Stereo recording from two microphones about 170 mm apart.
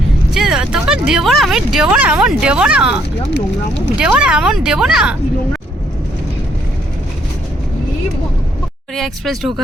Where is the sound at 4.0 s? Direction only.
5° right (ahead or behind).